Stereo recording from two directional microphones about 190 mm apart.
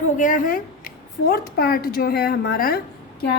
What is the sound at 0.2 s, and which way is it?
A woman's voice, 45° left (ahead or behind).